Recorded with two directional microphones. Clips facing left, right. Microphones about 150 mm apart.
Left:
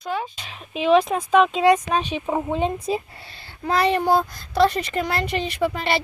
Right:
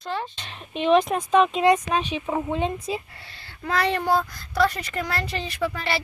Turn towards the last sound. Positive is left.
turn(degrees=20)  # may be behind; listen again after turning